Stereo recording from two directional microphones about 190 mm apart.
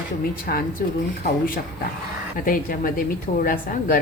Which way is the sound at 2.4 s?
45° left (ahead or behind).